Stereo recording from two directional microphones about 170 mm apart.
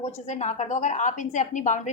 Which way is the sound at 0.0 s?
40° left (ahead or behind).